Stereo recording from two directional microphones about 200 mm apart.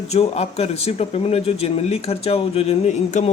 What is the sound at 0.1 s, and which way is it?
Speech, 30° left (ahead or behind).